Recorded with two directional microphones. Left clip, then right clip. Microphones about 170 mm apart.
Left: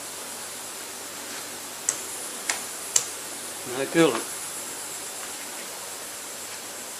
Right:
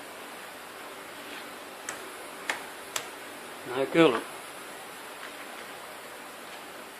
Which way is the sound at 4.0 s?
40° right (ahead or behind).